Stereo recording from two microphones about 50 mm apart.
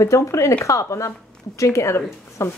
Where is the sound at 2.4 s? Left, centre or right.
Left.